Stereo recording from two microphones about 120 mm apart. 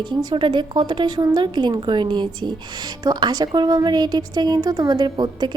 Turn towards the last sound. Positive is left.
turn(degrees=-35)  # may be behind; listen again after turning